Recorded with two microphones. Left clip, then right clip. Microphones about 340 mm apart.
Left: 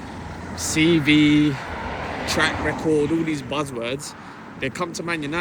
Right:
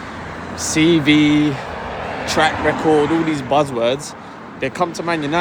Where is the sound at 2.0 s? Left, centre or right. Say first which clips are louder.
Right 4 dB; right.